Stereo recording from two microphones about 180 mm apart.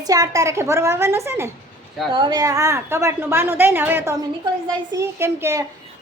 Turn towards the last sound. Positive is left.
turn(degrees=-15)  # may be behind; listen again after turning